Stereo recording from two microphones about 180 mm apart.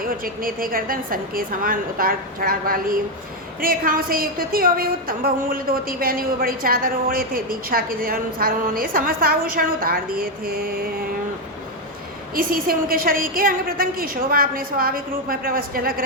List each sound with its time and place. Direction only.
0.0 s a woman's voice: 50° right (ahead or behind)
12.3 s a woman's voice: 55° right (ahead or behind)